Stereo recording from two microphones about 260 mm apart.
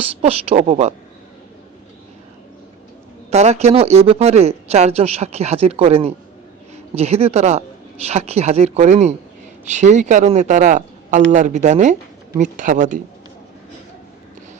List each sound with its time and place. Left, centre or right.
0.0 s speech: right
3.2 s speech: right